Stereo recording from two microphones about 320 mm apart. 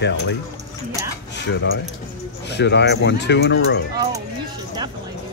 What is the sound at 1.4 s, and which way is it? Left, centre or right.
Speech, left.